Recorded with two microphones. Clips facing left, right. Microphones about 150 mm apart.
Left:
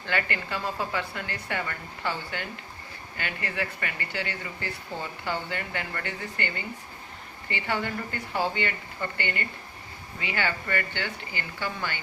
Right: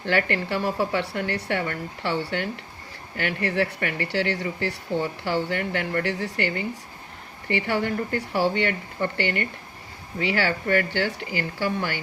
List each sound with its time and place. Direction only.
0.0 s a woman's voice: 65° right (ahead or behind)